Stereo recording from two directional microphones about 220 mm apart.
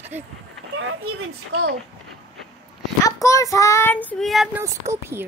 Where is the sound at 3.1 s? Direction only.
15° left (ahead or behind).